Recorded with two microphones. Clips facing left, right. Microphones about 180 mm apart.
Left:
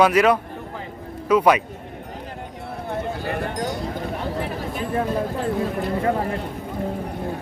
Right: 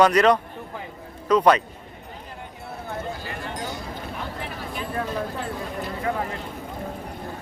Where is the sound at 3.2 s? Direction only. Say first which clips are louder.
Left 7 dB; 60° left (ahead or behind).